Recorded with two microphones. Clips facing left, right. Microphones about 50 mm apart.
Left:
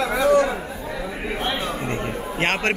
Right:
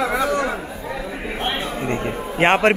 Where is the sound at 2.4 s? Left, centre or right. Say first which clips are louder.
Right 7 dB; right.